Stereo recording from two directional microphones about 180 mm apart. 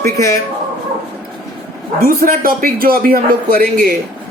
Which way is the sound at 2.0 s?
50° right (ahead or behind).